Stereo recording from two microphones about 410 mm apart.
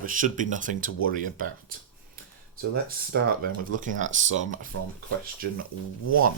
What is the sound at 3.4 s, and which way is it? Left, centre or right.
Speech, right.